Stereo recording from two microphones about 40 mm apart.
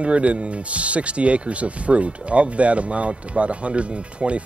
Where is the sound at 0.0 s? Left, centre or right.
Right.